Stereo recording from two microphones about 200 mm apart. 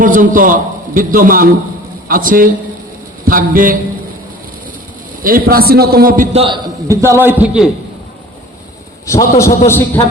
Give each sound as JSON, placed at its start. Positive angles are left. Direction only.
{"t": 0.0, "sound": "a man's voice", "side_deg": -40}
{"t": 5.2, "sound": "a man's voice", "side_deg": -45}
{"t": 6.3, "sound": "a man's voice", "side_deg": -25}
{"t": 6.8, "sound": "a man's voice", "side_deg": -15}
{"t": 9.4, "sound": "a man's voice", "side_deg": 10}